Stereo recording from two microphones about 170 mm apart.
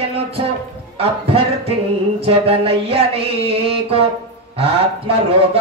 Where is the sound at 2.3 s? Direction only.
35° right (ahead or behind).